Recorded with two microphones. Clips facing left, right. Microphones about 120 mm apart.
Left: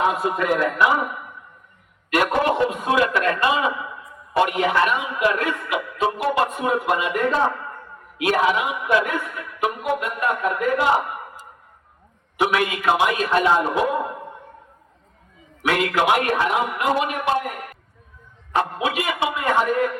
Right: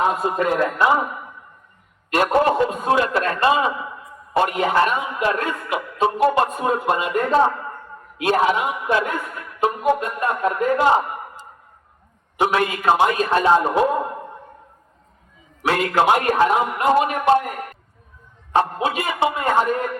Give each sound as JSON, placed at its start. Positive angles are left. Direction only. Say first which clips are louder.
{"t": 0.2, "sound": "speech", "louder": "right 1 dB", "side_deg": -30}
{"t": 2.1, "sound": "speech", "louder": "right 2 dB", "side_deg": -30}
{"t": 12.4, "sound": "speech", "louder": "right 1 dB", "side_deg": -35}
{"t": 15.6, "sound": "speech", "louder": "right 2 dB", "side_deg": -35}
{"t": 18.5, "sound": "speech", "louder": "right 2 dB", "side_deg": -30}